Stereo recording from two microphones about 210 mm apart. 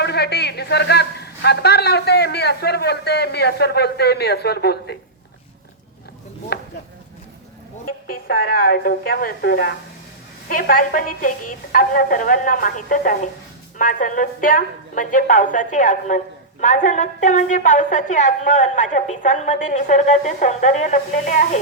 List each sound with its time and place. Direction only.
0.0 s a man's voice: 50° left (ahead or behind)
6.5 s a sound: 50° left (ahead or behind)
8.0 s a man's voice: 45° left (ahead or behind)